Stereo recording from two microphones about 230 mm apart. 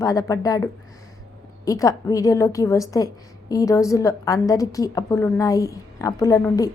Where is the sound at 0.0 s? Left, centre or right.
Centre.